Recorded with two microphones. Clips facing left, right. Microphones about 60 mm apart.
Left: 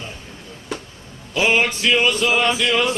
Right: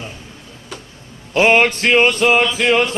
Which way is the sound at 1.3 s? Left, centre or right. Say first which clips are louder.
Right 5 dB; right.